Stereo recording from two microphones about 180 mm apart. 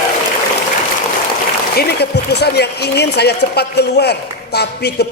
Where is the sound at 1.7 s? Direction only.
65° left (ahead or behind).